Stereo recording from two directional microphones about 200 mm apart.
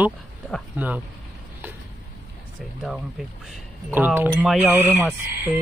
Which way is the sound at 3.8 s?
10° right (ahead or behind).